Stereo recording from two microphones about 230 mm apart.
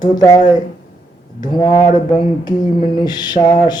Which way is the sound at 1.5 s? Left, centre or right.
Centre.